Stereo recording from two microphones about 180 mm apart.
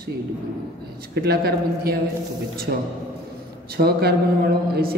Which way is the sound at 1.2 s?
60° right (ahead or behind).